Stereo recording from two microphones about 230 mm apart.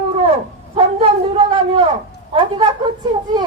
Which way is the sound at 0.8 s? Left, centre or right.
Right.